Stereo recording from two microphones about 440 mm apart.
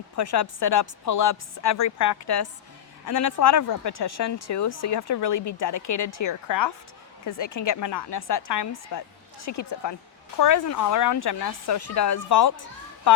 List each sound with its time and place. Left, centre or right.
0.2 s speech: left
3.5 s speech: left